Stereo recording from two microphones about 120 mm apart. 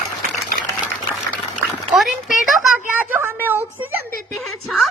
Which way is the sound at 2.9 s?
15° right (ahead or behind).